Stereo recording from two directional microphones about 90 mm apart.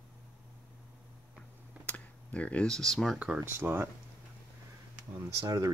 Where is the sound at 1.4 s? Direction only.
15° left (ahead or behind).